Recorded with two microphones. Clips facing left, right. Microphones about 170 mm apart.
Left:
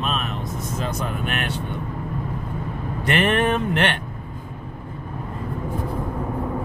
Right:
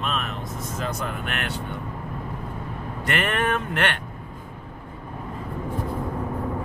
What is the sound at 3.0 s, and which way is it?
Speech, 20° left (ahead or behind).